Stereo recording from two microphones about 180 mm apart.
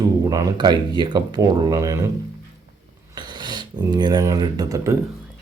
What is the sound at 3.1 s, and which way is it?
Speech, 25° right (ahead or behind).